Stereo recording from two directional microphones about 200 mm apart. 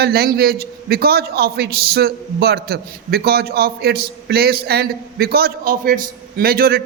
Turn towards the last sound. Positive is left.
turn(degrees=-50)  # may be behind; listen again after turning